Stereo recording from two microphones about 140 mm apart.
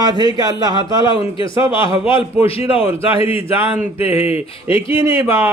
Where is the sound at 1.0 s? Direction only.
35° left (ahead or behind).